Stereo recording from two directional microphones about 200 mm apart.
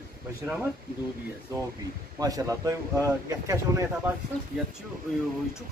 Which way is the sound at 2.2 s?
20° right (ahead or behind).